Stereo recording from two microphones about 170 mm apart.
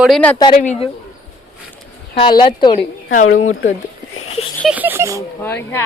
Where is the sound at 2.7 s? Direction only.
50° left (ahead or behind).